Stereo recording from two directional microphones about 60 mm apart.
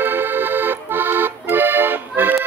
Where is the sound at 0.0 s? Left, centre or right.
Right.